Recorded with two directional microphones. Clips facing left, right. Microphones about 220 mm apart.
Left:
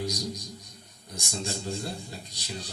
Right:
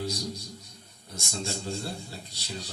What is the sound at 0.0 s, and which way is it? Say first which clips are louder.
A man's voice: left 1 dB; 15° left (ahead or behind).